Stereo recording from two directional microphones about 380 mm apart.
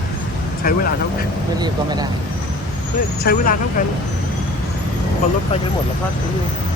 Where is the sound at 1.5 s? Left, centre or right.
Centre.